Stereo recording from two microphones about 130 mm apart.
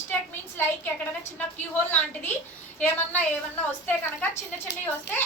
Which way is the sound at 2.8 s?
15° left (ahead or behind).